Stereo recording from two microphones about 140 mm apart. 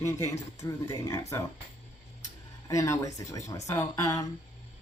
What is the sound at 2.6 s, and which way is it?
Speech, 25° left (ahead or behind).